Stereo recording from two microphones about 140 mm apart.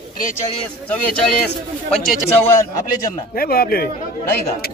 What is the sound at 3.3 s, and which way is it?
Speech, 90° left.